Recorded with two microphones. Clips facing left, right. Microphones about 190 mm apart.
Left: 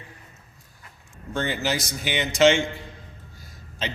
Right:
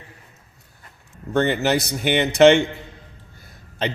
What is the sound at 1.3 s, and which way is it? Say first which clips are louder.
A man's voice: right 7 dB; 60° right (ahead or behind).